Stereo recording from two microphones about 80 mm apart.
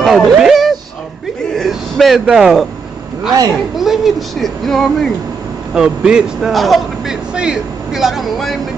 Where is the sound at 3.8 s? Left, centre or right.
Centre.